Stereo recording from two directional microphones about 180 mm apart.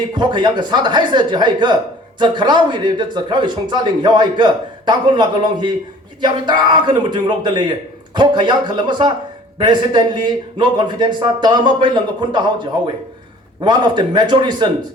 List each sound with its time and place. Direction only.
0.1 s speech: 25° right (ahead or behind)
13.6 s speech: 25° right (ahead or behind)